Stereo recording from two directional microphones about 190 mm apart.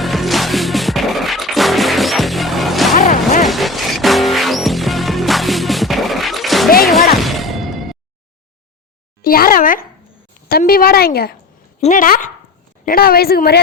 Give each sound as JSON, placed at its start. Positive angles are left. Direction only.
{"t": 0.0, "sound": "music", "side_deg": 0}
{"t": 2.9, "sound": "music", "side_deg": 45}
{"t": 3.4, "sound": "music", "side_deg": 0}
{"t": 9.2, "sound": "a sound", "side_deg": 50}
{"t": 10.5, "sound": "a woman's voice", "side_deg": 50}